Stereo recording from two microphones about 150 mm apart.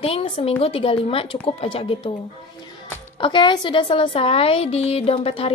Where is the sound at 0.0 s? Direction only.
40° left (ahead or behind).